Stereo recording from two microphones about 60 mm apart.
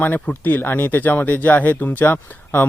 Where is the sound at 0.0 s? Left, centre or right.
Left.